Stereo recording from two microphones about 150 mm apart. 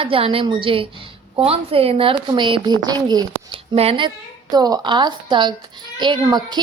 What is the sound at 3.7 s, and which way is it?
Speech, 40° right (ahead or behind).